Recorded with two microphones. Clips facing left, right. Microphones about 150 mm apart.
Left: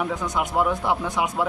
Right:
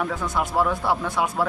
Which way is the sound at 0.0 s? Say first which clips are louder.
Even; 15° left (ahead or behind).